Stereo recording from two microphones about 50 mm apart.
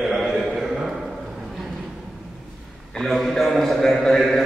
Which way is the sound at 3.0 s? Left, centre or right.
Centre.